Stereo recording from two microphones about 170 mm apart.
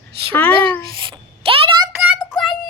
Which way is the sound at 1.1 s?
30° right (ahead or behind).